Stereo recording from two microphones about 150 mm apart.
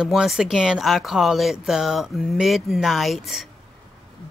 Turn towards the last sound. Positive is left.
turn(degrees=0)  # may be behind; listen again after turning